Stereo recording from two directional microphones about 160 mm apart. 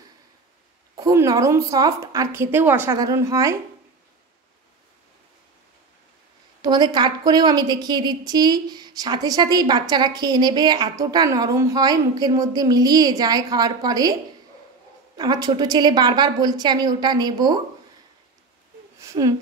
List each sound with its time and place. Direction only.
0.9 s a woman's voice: 20° right (ahead or behind)
6.6 s a woman's voice: 25° right (ahead or behind)
15.1 s a woman's voice: 25° right (ahead or behind)
18.9 s a sound: 20° right (ahead or behind)